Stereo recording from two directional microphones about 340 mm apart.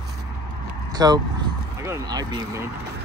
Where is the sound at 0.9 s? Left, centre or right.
Centre.